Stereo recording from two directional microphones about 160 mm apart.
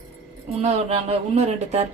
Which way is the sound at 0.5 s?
40° right (ahead or behind).